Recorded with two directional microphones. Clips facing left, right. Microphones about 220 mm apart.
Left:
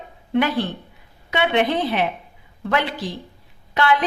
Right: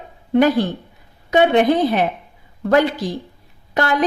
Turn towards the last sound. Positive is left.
turn(degrees=-40)  # may be behind; listen again after turning